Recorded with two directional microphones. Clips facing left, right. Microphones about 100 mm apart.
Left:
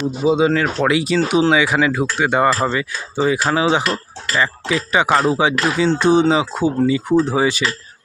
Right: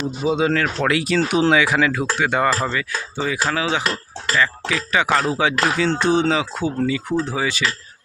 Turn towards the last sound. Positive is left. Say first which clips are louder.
# left 5 dB
turn(degrees=20)  # may be behind; listen again after turning